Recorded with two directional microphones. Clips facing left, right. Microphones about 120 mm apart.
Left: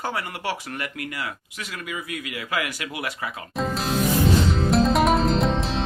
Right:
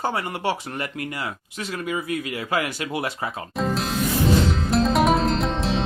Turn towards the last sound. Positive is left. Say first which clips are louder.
# left 1 dB
turn(degrees=0)  # may be behind; listen again after turning